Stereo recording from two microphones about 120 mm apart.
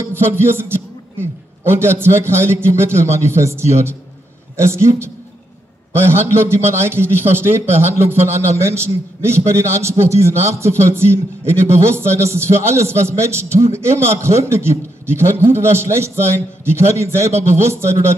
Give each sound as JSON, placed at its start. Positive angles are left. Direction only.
{"t": 0.0, "sound": "a man's voice", "side_deg": -20}